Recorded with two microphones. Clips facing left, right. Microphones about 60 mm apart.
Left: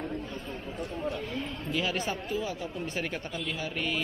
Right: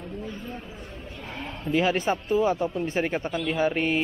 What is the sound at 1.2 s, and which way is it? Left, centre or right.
Speech, right.